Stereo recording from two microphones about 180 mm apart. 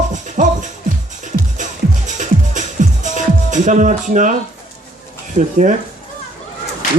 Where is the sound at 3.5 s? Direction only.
45° right (ahead or behind).